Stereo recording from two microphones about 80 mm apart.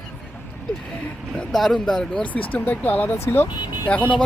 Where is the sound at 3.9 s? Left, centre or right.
Centre.